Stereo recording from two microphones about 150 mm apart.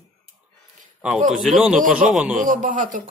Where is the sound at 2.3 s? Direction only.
60° right (ahead or behind).